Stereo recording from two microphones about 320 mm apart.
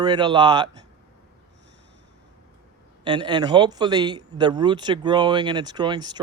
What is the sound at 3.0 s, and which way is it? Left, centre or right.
Speech, centre.